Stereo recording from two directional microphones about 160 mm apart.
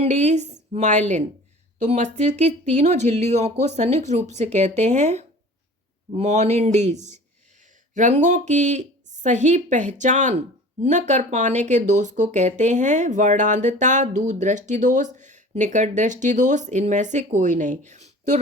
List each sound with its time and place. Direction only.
0.0 s a woman's voice: 45° right (ahead or behind)